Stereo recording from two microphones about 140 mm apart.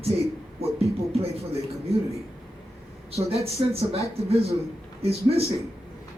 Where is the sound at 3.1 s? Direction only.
45° right (ahead or behind).